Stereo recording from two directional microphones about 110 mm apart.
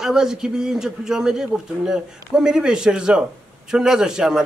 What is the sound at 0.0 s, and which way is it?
A man's voice, 5° right (ahead or behind).